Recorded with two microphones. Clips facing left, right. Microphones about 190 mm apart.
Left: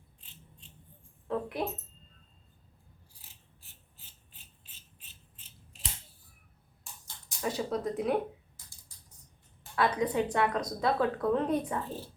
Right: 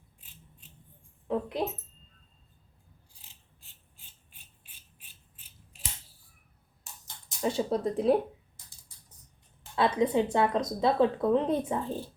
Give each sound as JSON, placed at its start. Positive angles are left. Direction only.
{"t": 1.3, "sound": "a sound", "side_deg": -20}
{"t": 3.9, "sound": "filing", "side_deg": -15}
{"t": 7.3, "sound": "speech", "side_deg": -25}
{"t": 9.7, "sound": "a woman's voice", "side_deg": -25}